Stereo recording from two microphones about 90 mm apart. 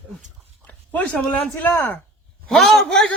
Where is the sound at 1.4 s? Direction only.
15° left (ahead or behind).